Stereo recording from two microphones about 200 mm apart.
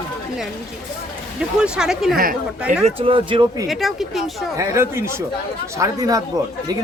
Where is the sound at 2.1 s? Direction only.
45° right (ahead or behind).